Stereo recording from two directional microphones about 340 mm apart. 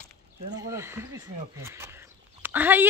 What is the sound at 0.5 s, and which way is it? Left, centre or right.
Speech, centre.